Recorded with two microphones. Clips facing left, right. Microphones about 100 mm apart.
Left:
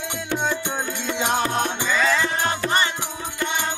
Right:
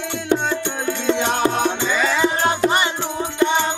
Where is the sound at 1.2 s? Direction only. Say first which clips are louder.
Even; centre (ahead or behind).